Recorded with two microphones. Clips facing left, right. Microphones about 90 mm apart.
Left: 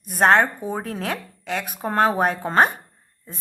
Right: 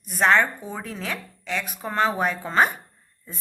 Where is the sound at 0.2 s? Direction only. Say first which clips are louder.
Left 3 dB; 40° left (ahead or behind).